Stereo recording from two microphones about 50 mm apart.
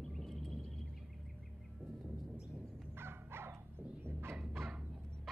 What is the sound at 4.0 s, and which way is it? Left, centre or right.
Fowl, right.